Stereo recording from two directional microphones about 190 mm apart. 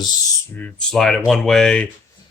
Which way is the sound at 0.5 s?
5° left (ahead or behind).